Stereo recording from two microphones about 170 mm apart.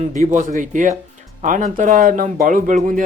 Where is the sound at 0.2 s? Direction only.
45° right (ahead or behind).